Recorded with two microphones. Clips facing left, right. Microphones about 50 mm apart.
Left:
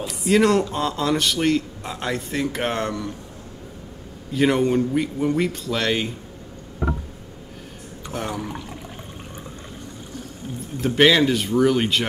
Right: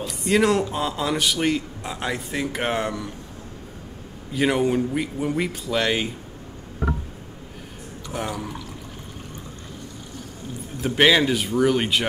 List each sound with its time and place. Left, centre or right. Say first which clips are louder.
0.0 s a man's voice: left 2 dB; centre
4.3 s a man's voice: left 2 dB; centre
8.1 s speech: even; centre
10.8 s a man's voice: left 1 dB; centre